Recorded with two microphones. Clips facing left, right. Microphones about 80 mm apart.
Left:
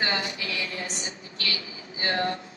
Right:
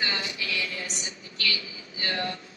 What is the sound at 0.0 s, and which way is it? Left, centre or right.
A woman's voice, left.